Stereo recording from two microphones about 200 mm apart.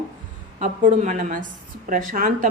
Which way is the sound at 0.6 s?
40° right (ahead or behind).